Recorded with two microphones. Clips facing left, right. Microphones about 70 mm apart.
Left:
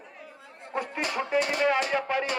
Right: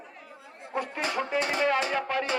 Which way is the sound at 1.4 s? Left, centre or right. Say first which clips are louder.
Left 1 dB; right.